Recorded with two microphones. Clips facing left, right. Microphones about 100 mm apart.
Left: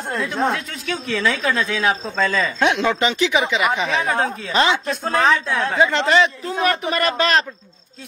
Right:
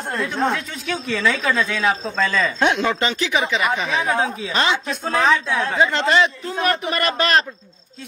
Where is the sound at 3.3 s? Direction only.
Centre (ahead or behind).